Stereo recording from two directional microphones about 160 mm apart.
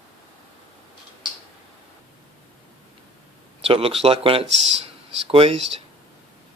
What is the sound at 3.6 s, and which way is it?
Speech, 35° right (ahead or behind).